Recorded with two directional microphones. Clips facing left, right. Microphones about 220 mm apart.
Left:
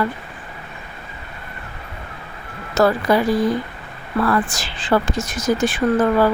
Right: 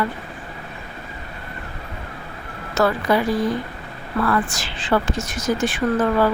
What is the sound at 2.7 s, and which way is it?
Speech, 40° left (ahead or behind).